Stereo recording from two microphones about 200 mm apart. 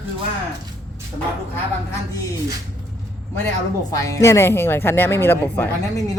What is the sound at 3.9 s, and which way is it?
A woman's voice, 15° left (ahead or behind).